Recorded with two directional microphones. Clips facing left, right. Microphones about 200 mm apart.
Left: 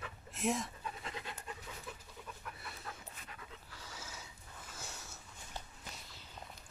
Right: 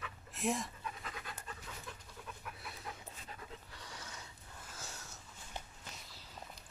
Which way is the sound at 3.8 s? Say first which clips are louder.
Even; 5° left (ahead or behind).